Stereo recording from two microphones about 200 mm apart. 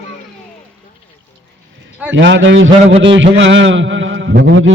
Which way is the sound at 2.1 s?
65° right (ahead or behind).